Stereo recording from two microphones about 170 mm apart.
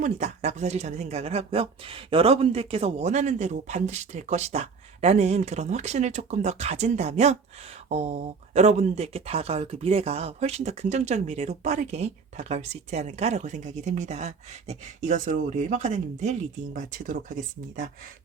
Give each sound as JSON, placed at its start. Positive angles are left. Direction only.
{"t": 0.0, "sound": "speech", "side_deg": -40}